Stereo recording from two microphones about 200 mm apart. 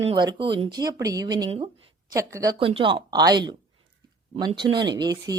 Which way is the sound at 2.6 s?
25° right (ahead or behind).